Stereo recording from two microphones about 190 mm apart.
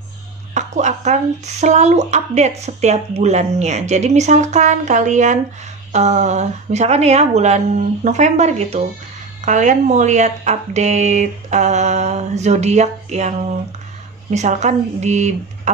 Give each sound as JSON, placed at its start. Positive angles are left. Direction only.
{"t": 0.6, "sound": "a sound", "side_deg": -40}
{"t": 1.6, "sound": "speech", "side_deg": -40}
{"t": 14.3, "sound": "speech", "side_deg": -40}